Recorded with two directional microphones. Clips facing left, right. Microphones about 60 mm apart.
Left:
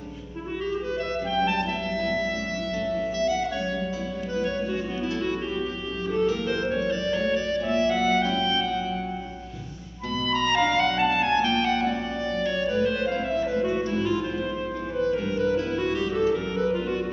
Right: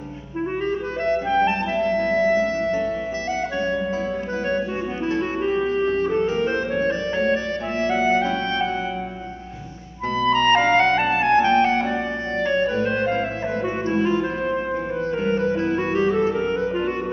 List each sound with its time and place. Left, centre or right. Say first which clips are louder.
0.7 s clarinet: right 4 dB; right
3.2 s music: left 1 dB; right
5.0 s music: right 8 dB; right
10.1 s clarinet: right 6 dB; right